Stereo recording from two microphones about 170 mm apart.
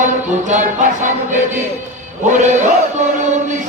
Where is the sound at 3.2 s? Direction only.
45° right (ahead or behind).